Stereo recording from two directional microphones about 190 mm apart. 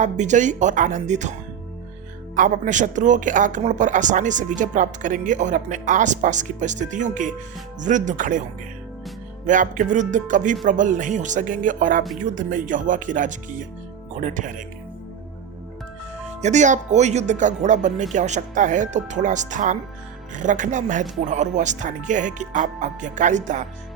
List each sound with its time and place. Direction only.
0.0 s speech: 40° right (ahead or behind)
2.3 s speech: 45° right (ahead or behind)
9.5 s speech: 40° right (ahead or behind)
16.4 s speech: 40° right (ahead or behind)